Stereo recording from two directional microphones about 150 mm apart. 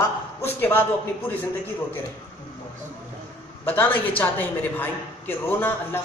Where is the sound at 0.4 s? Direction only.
15° left (ahead or behind).